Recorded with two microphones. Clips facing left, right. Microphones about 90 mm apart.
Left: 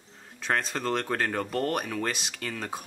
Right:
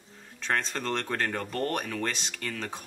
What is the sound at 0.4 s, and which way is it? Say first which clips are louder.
Speech: left 1 dB; 10° left (ahead or behind).